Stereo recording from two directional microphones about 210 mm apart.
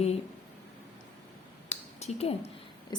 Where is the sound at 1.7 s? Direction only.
30° left (ahead or behind).